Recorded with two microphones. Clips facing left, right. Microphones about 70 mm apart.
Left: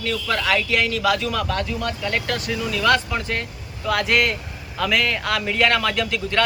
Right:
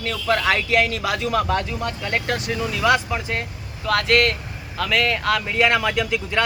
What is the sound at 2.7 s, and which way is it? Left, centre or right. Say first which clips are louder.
Speech: even; centre.